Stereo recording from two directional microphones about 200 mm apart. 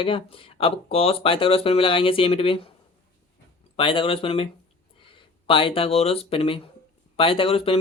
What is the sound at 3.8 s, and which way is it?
Speech, 25° left (ahead or behind).